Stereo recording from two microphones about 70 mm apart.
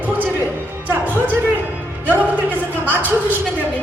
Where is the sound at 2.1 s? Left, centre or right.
Right.